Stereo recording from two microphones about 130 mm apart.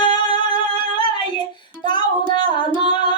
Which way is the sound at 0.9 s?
35° left (ahead or behind).